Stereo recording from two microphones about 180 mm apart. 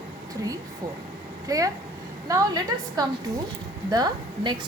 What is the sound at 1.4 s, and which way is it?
A woman's voice, 20° right (ahead or behind).